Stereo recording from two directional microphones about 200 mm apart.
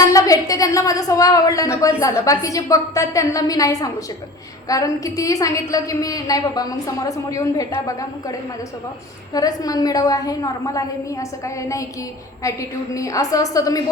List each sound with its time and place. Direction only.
0.0 s a woman's voice: 15° left (ahead or behind)